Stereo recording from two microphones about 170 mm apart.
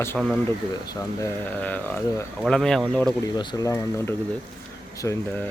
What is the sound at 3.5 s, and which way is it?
Speech, 20° left (ahead or behind).